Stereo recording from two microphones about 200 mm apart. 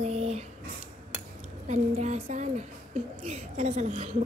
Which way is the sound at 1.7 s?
35° right (ahead or behind).